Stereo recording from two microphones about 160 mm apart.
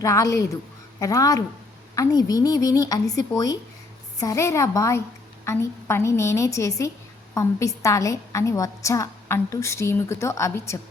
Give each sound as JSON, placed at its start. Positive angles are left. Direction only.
{"t": 0.0, "sound": "a woman's voice", "side_deg": 20}